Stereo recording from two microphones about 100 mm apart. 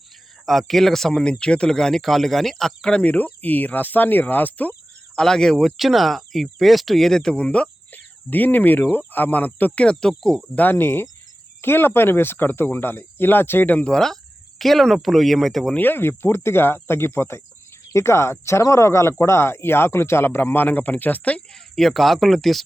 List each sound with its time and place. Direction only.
0.4 s speech: centre (ahead or behind)
5.2 s speech: 5° left (ahead or behind)
15.7 s speech: 20° left (ahead or behind); by 22.6 s centre (ahead or behind)